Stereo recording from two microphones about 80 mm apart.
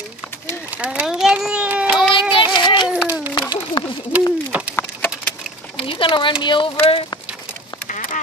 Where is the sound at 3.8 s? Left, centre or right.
Left.